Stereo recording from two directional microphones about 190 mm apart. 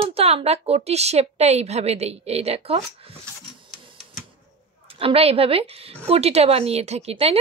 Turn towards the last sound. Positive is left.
turn(degrees=-30)  # may be behind; listen again after turning